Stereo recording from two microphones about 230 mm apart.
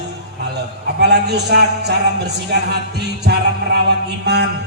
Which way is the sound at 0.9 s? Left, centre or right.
Right.